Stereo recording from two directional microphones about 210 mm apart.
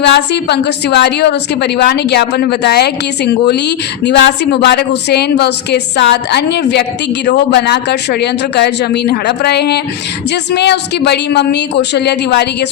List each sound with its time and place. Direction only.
0.0 s a woman's voice: 55° left (ahead or behind)